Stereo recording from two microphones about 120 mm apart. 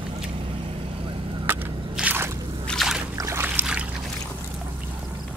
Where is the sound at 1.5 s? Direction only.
15° right (ahead or behind).